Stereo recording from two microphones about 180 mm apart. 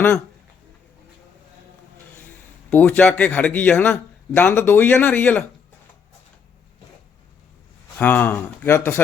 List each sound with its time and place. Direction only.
2.6 s speech: 10° left (ahead or behind)
7.9 s speech: 10° left (ahead or behind)